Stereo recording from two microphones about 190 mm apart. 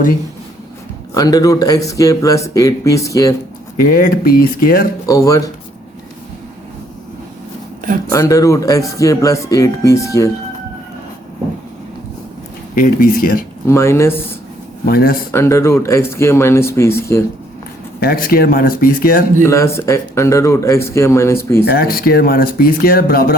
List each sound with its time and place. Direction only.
1.1 s speech: 20° left (ahead or behind)
3.8 s speech: 50° left (ahead or behind)
5.0 s speech: 15° left (ahead or behind)
8.1 s speech: 15° left (ahead or behind)
12.7 s speech: 50° left (ahead or behind)
13.7 s speech: 15° left (ahead or behind)
14.8 s speech: 50° left (ahead or behind)
15.3 s speech: 15° left (ahead or behind)
18.0 s speech: 50° left (ahead or behind)
19.5 s speech: 15° left (ahead or behind)
21.6 s speech: 55° left (ahead or behind)